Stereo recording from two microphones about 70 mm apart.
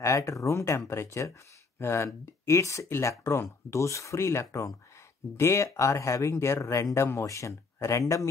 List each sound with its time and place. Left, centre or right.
0.0 s speech: left